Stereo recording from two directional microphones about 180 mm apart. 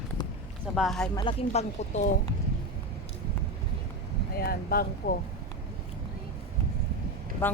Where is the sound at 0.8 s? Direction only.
Centre (ahead or behind).